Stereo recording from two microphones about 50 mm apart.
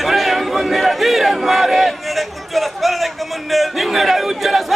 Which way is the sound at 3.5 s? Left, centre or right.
Centre.